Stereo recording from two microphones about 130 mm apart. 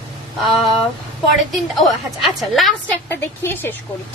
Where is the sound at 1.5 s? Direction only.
Centre (ahead or behind).